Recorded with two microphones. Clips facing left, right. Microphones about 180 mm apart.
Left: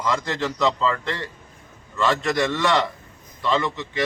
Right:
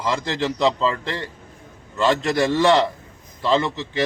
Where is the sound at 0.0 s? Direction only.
30° right (ahead or behind).